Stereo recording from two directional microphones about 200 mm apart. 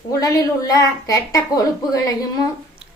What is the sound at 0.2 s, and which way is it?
A woman's voice, 20° left (ahead or behind).